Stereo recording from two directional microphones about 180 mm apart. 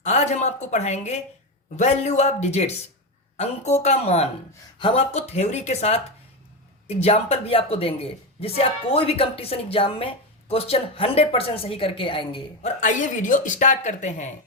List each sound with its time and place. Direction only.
0.0 s a woman's voice: 40° left (ahead or behind)
12.8 s speech: 45° left (ahead or behind)